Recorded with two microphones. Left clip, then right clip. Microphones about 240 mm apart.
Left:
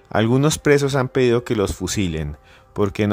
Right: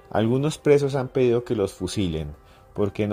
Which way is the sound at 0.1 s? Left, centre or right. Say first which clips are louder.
Left 5 dB; centre.